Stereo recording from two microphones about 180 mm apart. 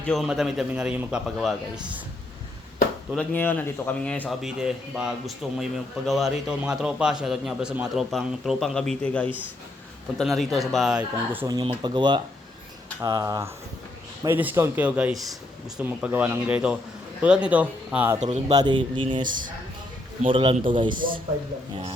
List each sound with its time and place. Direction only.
0.1 s speech: centre (ahead or behind)
3.1 s speech: 10° left (ahead or behind); by 11.5 s 10° right (ahead or behind)
11.5 s speech: 30° right (ahead or behind); by 18.2 s 10° right (ahead or behind)
18.2 s speech: 40° right (ahead or behind)
18.5 s speech: 25° right (ahead or behind)
20.3 s speech: 30° right (ahead or behind)